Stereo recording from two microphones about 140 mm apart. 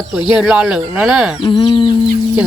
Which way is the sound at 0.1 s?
5° right (ahead or behind).